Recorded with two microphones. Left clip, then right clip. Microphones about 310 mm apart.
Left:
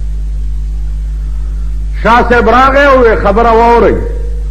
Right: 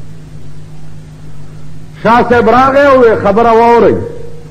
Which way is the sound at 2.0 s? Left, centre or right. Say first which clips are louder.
Even; left.